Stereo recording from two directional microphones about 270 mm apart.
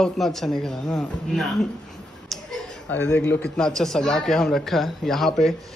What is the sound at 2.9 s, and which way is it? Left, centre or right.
Speech, centre.